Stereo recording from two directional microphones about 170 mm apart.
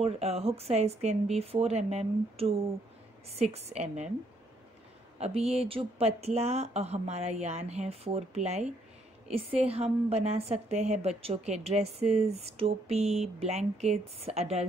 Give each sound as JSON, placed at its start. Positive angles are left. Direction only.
{"t": 0.0, "sound": "a woman's voice", "side_deg": -35}
{"t": 5.2, "sound": "a woman's voice", "side_deg": -35}